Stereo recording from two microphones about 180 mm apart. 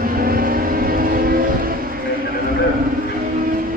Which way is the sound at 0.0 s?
55° right (ahead or behind).